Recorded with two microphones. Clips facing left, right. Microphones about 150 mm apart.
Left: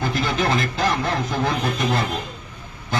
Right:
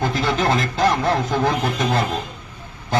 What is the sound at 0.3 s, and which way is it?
Speech, 40° right (ahead or behind).